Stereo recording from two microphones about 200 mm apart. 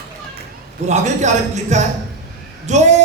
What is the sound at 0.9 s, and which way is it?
A man's voice, 35° right (ahead or behind).